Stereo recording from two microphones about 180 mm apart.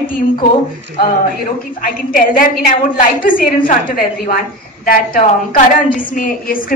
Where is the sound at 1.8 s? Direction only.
50° left (ahead or behind).